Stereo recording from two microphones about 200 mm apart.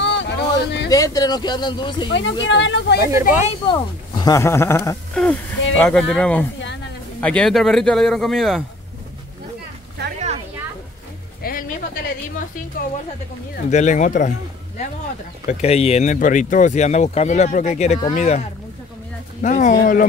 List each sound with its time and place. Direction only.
0.0 s a sound: 60° left (ahead or behind)
0.8 s speech: 20° left (ahead or behind)
2.0 s a woman's voice: 65° left (ahead or behind)
3.0 s speech: 15° right (ahead or behind)
3.6 s speech: 20° left (ahead or behind); by 8.6 s centre (ahead or behind)
10.1 s a sound: 35° right (ahead or behind)
11.4 s music: 50° left (ahead or behind)
13.7 s speech: 35° left (ahead or behind)
15.4 s speech: 30° left (ahead or behind)